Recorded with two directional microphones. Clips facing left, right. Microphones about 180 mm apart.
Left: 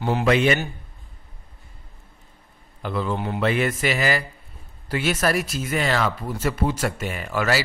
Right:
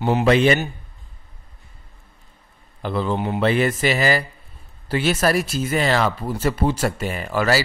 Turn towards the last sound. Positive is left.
turn(degrees=-35)  # may be behind; listen again after turning